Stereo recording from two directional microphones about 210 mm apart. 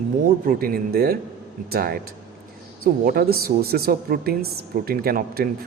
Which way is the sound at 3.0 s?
45° right (ahead or behind).